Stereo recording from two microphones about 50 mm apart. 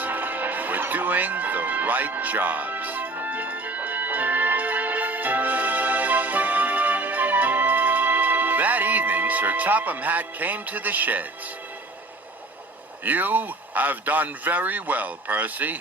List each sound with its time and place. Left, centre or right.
0.0 s music: right
13.1 s speech: right